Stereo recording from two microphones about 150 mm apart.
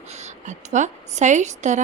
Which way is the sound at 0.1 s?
50° right (ahead or behind).